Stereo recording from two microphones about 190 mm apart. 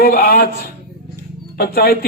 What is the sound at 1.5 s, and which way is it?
Speech, 55° left (ahead or behind).